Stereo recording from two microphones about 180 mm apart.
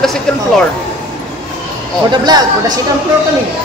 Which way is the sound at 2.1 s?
25° right (ahead or behind).